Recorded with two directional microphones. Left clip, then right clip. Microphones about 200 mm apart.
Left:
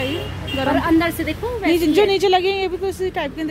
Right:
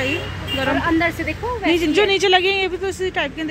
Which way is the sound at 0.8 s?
60° left (ahead or behind).